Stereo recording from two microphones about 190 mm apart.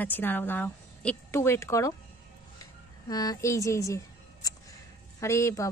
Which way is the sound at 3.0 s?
20° left (ahead or behind).